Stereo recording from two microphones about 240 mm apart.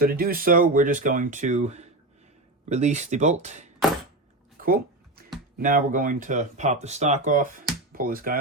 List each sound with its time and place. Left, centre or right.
0.0 s speech: right
4.5 s a sound: right
5.5 s speech: right